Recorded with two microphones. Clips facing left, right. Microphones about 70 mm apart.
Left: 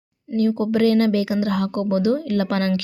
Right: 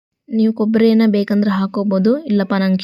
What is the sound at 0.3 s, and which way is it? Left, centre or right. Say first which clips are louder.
Speech: right 5 dB; right.